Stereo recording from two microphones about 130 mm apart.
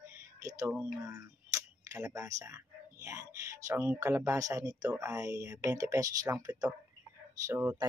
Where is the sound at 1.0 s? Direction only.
25° right (ahead or behind).